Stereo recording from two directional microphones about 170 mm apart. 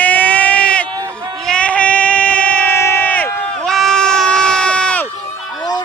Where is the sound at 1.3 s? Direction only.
5° left (ahead or behind).